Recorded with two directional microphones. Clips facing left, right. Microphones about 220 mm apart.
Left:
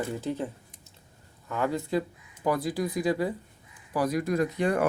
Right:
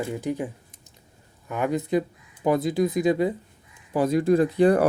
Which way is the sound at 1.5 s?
20° right (ahead or behind).